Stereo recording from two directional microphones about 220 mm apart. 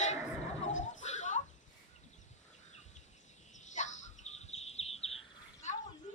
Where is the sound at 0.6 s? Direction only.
35° left (ahead or behind).